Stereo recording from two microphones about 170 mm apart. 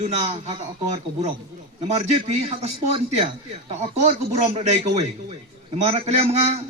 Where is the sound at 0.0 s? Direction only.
40° right (ahead or behind).